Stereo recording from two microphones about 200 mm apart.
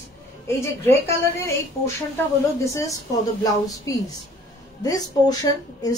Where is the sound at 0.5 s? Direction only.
15° left (ahead or behind).